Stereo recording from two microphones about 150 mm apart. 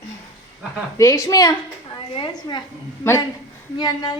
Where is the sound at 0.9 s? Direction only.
20° left (ahead or behind).